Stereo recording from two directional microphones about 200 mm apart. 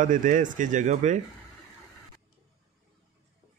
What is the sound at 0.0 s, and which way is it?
Speech, 40° right (ahead or behind).